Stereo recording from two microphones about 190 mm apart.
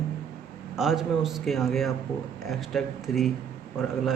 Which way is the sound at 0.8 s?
Centre (ahead or behind).